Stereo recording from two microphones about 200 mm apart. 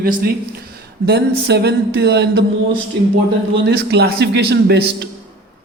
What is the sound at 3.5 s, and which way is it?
Speech, 55° right (ahead or behind).